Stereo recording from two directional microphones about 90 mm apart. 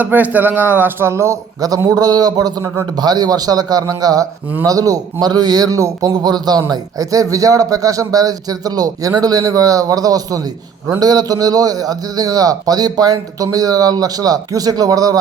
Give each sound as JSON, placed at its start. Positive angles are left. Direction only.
{"t": 0.0, "sound": "a man's voice", "side_deg": -20}